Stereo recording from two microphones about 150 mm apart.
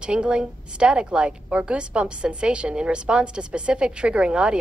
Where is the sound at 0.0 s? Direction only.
5° right (ahead or behind).